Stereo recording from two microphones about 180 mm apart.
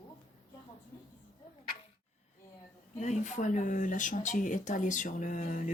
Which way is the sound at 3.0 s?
40° left (ahead or behind).